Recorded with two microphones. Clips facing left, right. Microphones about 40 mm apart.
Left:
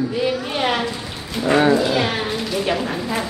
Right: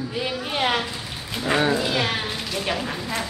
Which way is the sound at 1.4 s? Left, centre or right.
Centre.